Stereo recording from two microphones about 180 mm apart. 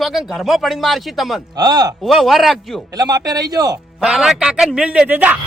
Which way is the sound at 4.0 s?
5° right (ahead or behind).